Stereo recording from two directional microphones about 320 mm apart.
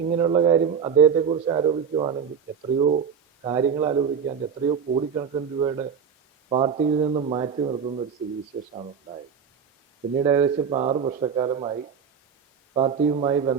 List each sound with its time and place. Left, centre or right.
0.1 s speech: centre
10.2 s speech: centre